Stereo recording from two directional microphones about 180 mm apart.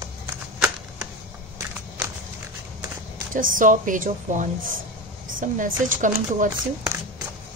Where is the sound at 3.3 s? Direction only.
50° right (ahead or behind).